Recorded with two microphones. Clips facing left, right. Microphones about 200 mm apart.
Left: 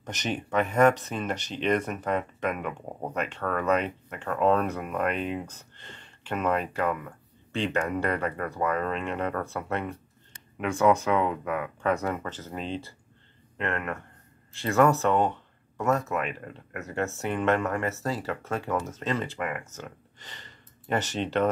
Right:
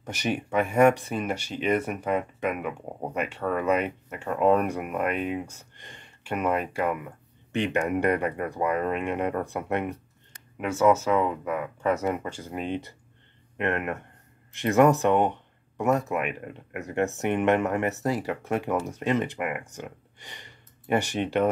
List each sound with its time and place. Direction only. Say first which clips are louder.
0.0 s speech: right 3 dB; 10° right (ahead or behind)
10.6 s speech: right 1 dB; 5° right (ahead or behind)
12.0 s speech: right 3 dB; 15° right (ahead or behind)